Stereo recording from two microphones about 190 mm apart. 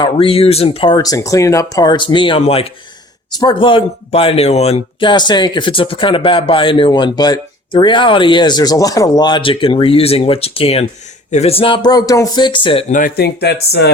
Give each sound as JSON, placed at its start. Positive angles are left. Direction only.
{"t": 0.0, "sound": "speech", "side_deg": 30}
{"t": 12.9, "sound": "speech", "side_deg": 45}